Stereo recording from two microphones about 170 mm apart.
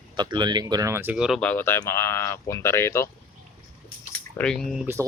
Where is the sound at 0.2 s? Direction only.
25° right (ahead or behind); by 1.4 s 5° right (ahead or behind).